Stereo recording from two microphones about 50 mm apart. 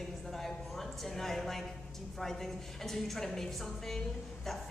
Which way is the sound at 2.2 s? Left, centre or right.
Centre.